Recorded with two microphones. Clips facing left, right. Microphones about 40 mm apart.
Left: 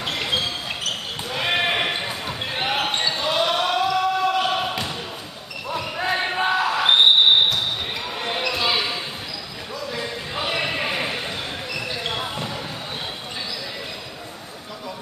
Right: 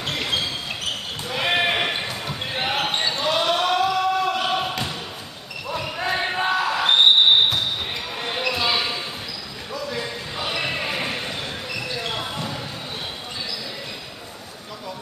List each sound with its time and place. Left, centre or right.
0.0 s basketball bounce: centre
8.2 s basketball bounce: centre
10.3 s a sound: centre
10.8 s basketball bounce: centre